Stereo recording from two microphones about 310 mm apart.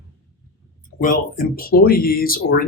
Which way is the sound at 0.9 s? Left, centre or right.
Left.